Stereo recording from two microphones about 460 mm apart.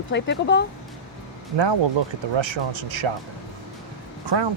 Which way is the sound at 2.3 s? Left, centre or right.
Right.